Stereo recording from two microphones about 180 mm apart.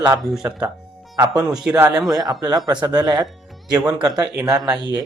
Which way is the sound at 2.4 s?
20° right (ahead or behind).